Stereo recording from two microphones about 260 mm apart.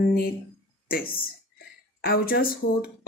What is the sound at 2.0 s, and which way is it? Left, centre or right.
Speech, left.